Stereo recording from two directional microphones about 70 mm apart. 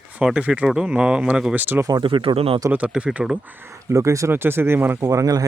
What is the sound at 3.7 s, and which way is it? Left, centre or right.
Speech, right.